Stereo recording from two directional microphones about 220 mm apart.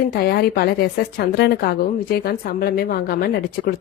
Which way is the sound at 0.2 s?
45° left (ahead or behind).